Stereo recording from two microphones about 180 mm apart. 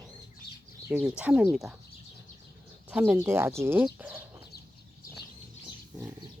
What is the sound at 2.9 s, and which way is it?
Speech, 10° right (ahead or behind).